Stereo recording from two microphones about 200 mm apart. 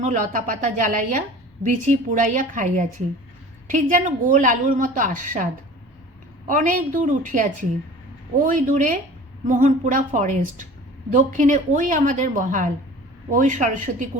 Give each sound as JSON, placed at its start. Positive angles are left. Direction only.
{"t": 0.0, "sound": "a woman's voice", "side_deg": -40}
{"t": 6.5, "sound": "a woman's voice", "side_deg": -40}